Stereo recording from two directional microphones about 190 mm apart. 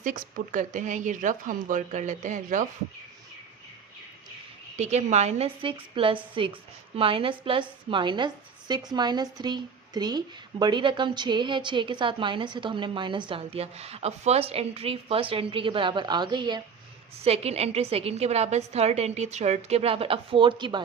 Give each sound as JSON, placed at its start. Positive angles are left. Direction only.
{"t": 0.0, "sound": "a woman's voice", "side_deg": -45}
{"t": 4.8, "sound": "a woman's voice", "side_deg": -35}